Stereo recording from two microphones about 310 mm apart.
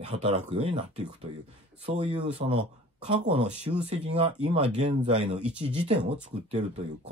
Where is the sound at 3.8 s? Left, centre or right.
Centre.